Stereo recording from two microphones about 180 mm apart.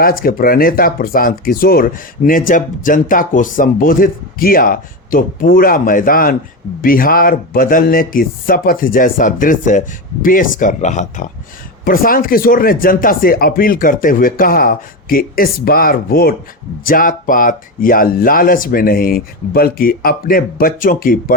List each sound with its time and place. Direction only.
0.0 s speech: 55° left (ahead or behind)
11.9 s speech: 55° left (ahead or behind)